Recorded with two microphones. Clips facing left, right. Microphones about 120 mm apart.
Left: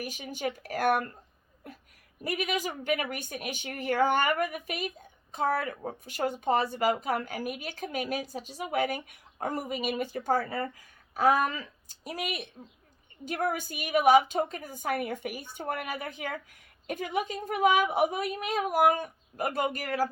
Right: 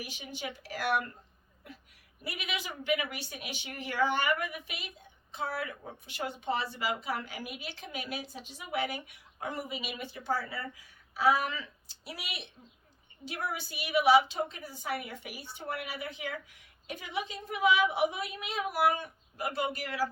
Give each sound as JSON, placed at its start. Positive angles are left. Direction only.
{"t": 0.0, "sound": "a woman's voice", "side_deg": 45}
{"t": 1.6, "sound": "a sound", "side_deg": 45}
{"t": 2.2, "sound": "a woman's voice", "side_deg": 45}